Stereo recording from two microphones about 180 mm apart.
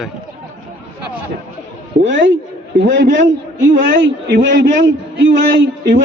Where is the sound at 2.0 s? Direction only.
90° right.